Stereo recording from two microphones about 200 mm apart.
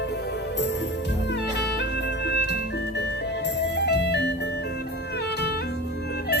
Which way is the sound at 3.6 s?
55° left (ahead or behind).